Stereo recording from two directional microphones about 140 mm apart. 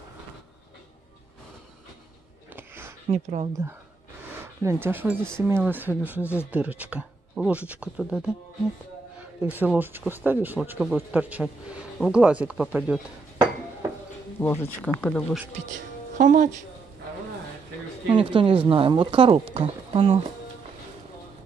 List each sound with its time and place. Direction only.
2.5 s a sound: 15° right (ahead or behind)
3.1 s speech: 55° right (ahead or behind)
4.6 s speech: 15° right (ahead or behind)
9.4 s speech: 10° right (ahead or behind)
14.4 s speech: 15° left (ahead or behind)
15.5 s speech: 60° right (ahead or behind)
18.1 s speech: 35° right (ahead or behind)